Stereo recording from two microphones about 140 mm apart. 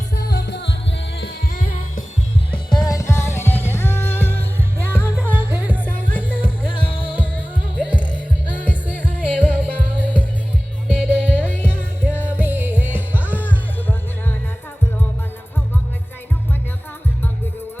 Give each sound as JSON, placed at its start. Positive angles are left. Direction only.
{"t": 2.5, "sound": "music", "side_deg": 30}
{"t": 5.3, "sound": "music", "side_deg": -10}
{"t": 5.8, "sound": "music", "side_deg": 15}
{"t": 6.2, "sound": "music", "side_deg": -10}
{"t": 11.1, "sound": "music", "side_deg": 10}
{"t": 12.3, "sound": "music", "side_deg": -15}
{"t": 13.2, "sound": "music", "side_deg": 10}